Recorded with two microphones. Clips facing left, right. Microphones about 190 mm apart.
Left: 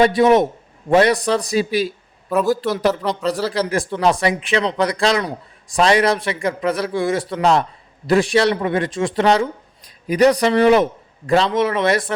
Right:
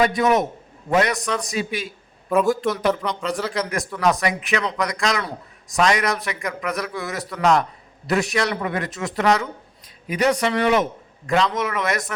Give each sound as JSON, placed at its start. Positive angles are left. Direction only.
{"t": 0.0, "sound": "a man's voice", "side_deg": 30}